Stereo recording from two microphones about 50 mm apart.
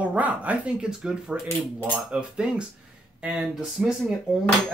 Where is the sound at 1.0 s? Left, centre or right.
Centre.